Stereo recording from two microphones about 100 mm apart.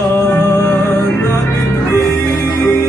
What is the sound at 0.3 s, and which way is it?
Music, 30° left (ahead or behind).